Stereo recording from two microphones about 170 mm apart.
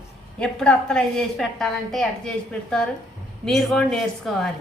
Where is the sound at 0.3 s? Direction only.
5° left (ahead or behind).